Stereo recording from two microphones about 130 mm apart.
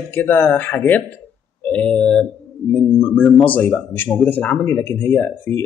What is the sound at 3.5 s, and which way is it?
Speech, 15° left (ahead or behind).